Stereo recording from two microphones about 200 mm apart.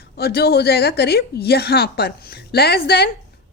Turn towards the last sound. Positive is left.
turn(degrees=55)  # may be behind; listen again after turning